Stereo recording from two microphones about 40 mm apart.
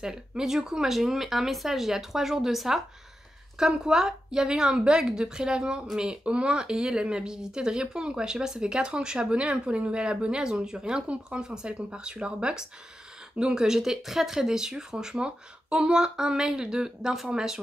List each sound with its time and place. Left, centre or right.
0.0 s speech: centre
6.2 s speech: right